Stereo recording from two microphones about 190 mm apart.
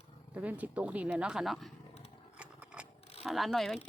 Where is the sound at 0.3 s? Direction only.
10° right (ahead or behind).